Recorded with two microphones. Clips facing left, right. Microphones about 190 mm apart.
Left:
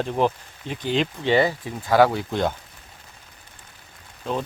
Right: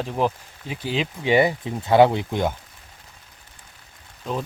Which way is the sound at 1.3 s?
20° right (ahead or behind).